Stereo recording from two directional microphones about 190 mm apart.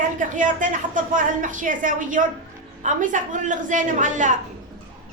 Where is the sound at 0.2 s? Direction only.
40° right (ahead or behind).